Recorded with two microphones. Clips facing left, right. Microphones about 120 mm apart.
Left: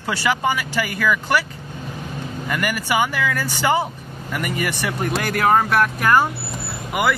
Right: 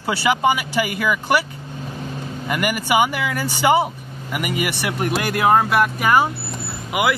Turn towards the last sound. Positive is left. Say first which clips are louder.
# even
turn(degrees=-5)  # may be behind; listen again after turning